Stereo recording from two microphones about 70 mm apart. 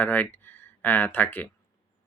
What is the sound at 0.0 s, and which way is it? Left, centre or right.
Speech, left.